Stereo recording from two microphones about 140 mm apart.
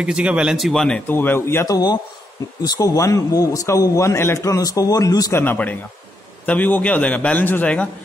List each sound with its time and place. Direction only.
0.0 s a man's voice: 5° right (ahead or behind); by 5.4 s 25° left (ahead or behind)
5.4 s a man's voice: 10° left (ahead or behind)